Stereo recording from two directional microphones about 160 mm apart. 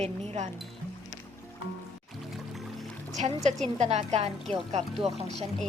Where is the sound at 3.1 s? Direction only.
45° right (ahead or behind).